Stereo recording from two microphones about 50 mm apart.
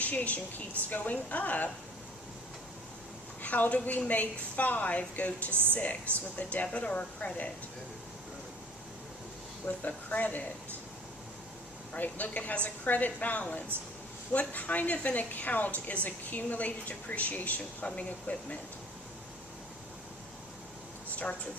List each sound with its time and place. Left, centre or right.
0.0 s a woman's voice: left
3.4 s a woman's voice: left
9.6 s a woman's voice: left
11.9 s a woman's voice: left